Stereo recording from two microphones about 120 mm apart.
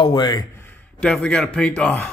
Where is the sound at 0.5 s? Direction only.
15° left (ahead or behind).